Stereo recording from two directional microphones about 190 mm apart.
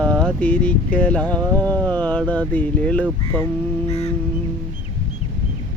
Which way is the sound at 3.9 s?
35° left (ahead or behind).